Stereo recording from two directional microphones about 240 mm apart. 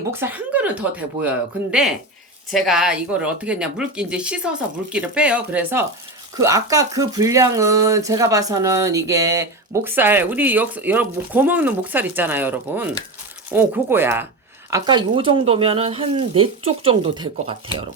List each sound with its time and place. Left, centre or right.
0.1 s speech: centre